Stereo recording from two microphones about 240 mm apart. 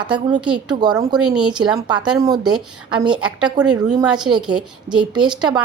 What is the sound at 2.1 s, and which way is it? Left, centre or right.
A woman's voice, centre.